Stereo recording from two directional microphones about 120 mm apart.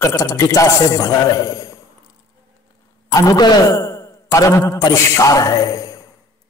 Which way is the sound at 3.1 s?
30° left (ahead or behind).